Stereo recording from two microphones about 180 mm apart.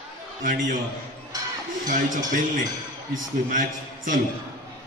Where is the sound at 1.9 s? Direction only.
45° right (ahead or behind).